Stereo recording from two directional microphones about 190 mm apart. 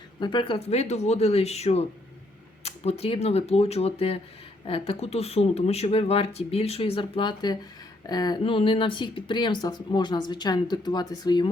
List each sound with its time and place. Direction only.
0.2 s speech: 25° left (ahead or behind)